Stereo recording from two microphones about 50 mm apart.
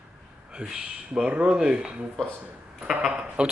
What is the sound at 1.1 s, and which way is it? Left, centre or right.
Speech, right.